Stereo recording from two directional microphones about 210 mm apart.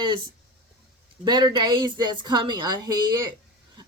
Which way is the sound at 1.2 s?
20° right (ahead or behind).